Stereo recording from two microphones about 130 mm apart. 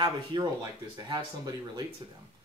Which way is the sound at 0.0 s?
30° right (ahead or behind).